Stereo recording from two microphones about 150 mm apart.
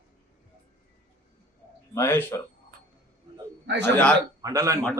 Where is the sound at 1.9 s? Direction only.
15° left (ahead or behind).